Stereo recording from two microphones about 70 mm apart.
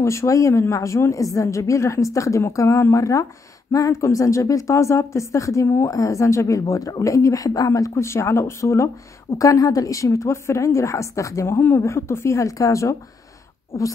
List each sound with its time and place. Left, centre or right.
0.0 s a woman's voice: left